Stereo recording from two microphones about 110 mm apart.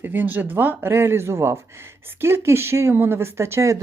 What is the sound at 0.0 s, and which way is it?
A man's voice, 15° right (ahead or behind).